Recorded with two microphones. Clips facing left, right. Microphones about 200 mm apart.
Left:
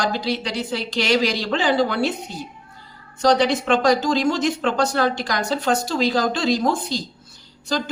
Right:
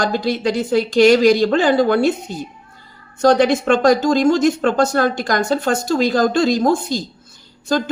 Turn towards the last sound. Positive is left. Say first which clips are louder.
# right 6 dB
turn(degrees=-50)  # may be behind; listen again after turning